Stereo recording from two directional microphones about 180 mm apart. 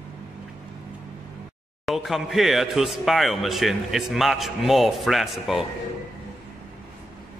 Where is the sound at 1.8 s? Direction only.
Centre (ahead or behind).